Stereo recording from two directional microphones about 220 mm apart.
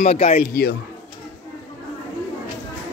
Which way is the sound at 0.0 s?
30° left (ahead or behind).